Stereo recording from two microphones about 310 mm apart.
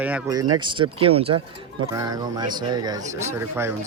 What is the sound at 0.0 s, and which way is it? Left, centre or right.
Speech, centre.